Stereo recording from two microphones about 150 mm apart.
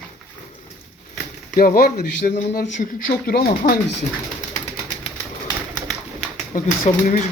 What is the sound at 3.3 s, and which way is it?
Speech, 90° left.